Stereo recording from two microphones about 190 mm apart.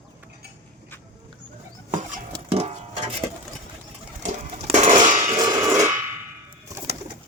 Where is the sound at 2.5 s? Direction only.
35° right (ahead or behind).